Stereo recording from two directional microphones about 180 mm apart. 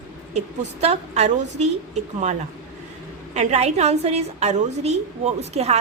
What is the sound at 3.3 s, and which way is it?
A woman's voice, 40° right (ahead or behind).